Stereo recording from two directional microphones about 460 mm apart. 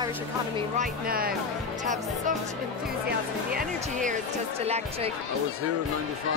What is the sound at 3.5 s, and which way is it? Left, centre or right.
Speech, centre.